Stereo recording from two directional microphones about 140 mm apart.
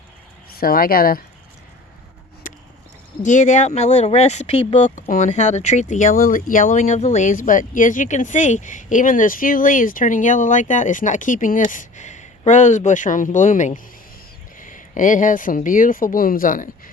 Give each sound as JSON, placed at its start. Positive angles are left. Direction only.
{"t": 0.6, "sound": "speech", "side_deg": 90}
{"t": 3.2, "sound": "speech", "side_deg": 60}